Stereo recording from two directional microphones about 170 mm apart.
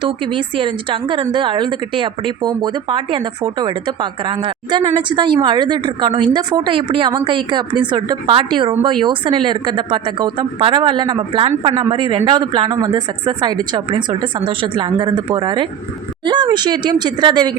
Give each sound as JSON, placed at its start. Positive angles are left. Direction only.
{"t": 0.0, "sound": "speech", "side_deg": -30}